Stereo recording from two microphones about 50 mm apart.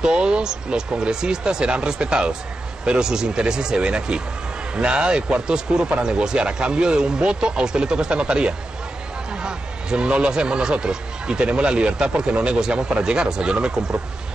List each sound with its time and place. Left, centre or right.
0.0 s speech: centre